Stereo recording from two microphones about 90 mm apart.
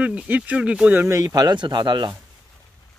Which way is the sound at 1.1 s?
45° right (ahead or behind).